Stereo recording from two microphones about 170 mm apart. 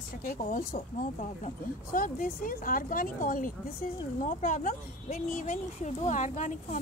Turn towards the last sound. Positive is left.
turn(degrees=45)  # may be behind; listen again after turning